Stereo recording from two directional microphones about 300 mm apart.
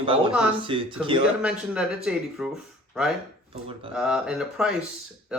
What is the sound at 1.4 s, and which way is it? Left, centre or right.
Speech, centre.